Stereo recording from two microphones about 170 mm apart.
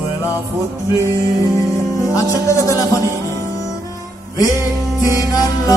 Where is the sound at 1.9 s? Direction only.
20° left (ahead or behind).